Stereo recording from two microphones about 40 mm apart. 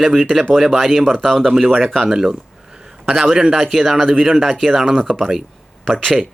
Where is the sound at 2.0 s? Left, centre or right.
Centre.